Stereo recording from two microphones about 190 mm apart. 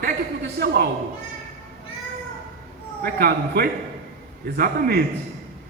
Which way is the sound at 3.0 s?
55° right (ahead or behind).